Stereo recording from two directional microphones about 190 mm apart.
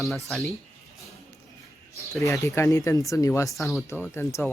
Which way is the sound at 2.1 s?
15° left (ahead or behind).